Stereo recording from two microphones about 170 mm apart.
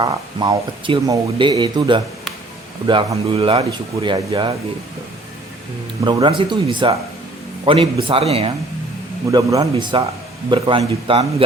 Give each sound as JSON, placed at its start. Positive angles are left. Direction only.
{"t": 0.0, "sound": "speech", "side_deg": -25}
{"t": 6.1, "sound": "a man's voice", "side_deg": -25}
{"t": 9.3, "sound": "a man's voice", "side_deg": -20}